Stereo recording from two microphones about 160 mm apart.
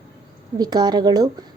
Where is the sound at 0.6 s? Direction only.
25° right (ahead or behind).